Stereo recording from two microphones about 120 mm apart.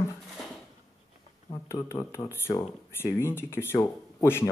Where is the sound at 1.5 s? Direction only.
25° left (ahead or behind).